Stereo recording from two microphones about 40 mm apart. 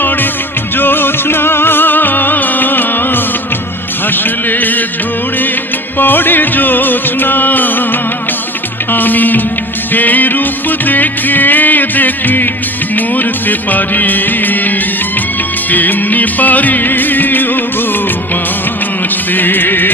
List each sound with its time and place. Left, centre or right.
0.8 s music: left
4.0 s a sound: left
6.0 s music: left
8.9 s music: left
15.7 s music: left
19.3 s music: left